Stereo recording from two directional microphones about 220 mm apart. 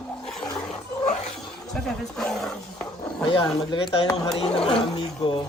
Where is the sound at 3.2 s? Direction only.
20° left (ahead or behind).